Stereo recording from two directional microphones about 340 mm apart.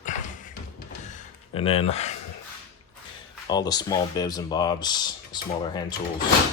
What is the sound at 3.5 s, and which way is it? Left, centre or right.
Speech, centre.